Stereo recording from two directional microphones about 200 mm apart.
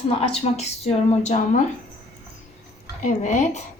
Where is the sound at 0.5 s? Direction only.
30° left (ahead or behind).